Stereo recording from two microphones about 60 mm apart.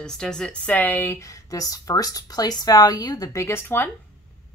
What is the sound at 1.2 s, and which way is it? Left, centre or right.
Speech, left.